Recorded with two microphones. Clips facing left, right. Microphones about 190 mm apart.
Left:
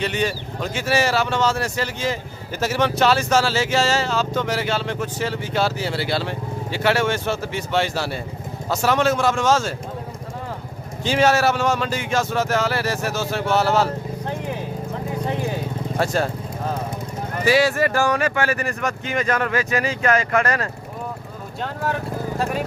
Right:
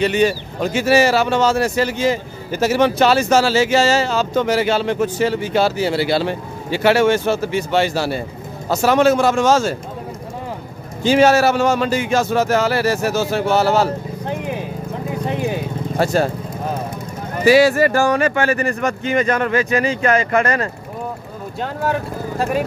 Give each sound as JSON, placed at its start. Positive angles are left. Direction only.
{"t": 0.0, "sound": "speech", "side_deg": -5}
{"t": 11.1, "sound": "speech", "side_deg": -5}
{"t": 14.2, "sound": "vehicle", "side_deg": -15}
{"t": 16.0, "sound": "vehicle", "side_deg": -5}
{"t": 17.5, "sound": "speech", "side_deg": -5}